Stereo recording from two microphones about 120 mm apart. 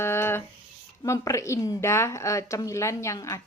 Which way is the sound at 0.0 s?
20° left (ahead or behind).